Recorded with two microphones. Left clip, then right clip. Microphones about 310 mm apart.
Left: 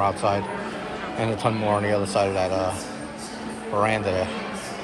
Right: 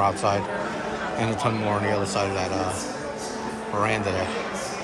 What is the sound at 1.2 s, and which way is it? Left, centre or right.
A man's voice, centre.